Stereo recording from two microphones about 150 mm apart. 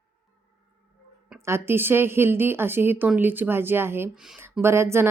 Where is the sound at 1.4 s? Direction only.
15° right (ahead or behind).